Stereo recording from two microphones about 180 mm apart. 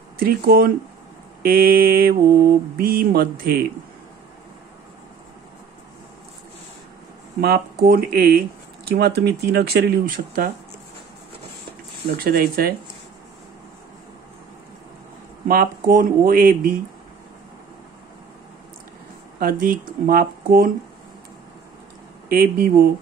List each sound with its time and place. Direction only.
0.2 s speech: 55° right (ahead or behind)
7.3 s speech: 60° right (ahead or behind)
12.1 s speech: 55° right (ahead or behind)
15.4 s speech: 55° right (ahead or behind)
19.4 s speech: 50° right (ahead or behind)
22.3 s speech: 55° right (ahead or behind)